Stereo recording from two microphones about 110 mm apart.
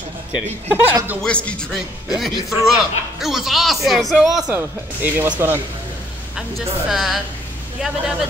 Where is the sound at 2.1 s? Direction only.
Centre (ahead or behind).